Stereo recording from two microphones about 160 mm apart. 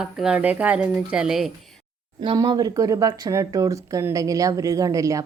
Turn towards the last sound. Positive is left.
turn(degrees=-20)  # may be behind; listen again after turning